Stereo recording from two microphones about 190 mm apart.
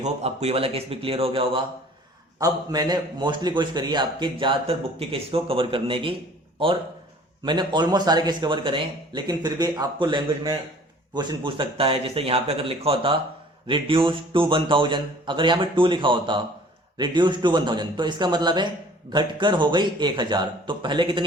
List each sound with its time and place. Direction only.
0.0 s a man's voice: 35° right (ahead or behind)
7.4 s a man's voice: 25° right (ahead or behind)